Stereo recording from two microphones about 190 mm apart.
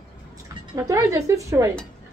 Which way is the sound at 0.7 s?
15° right (ahead or behind).